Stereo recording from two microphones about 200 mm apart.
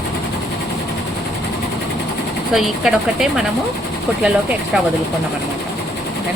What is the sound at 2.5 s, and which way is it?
Speech, centre (ahead or behind).